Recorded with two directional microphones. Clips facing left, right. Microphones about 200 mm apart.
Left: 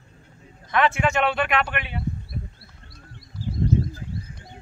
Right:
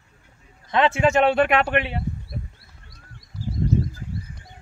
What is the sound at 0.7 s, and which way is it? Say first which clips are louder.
Speech: right 3 dB; 25° right (ahead or behind).